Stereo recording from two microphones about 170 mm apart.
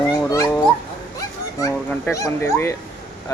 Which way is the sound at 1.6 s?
15° left (ahead or behind).